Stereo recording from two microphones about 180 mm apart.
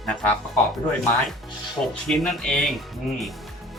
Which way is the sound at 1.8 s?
10° left (ahead or behind).